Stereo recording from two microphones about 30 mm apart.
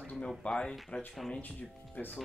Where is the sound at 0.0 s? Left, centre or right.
Left.